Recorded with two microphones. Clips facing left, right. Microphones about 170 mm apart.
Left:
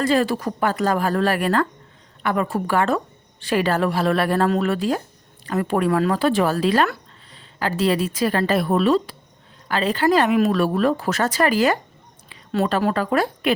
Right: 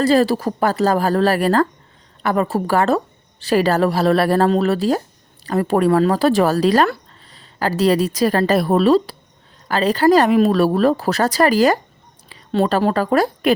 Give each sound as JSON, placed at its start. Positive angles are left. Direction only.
{"t": 0.0, "sound": "a woman's voice", "side_deg": -35}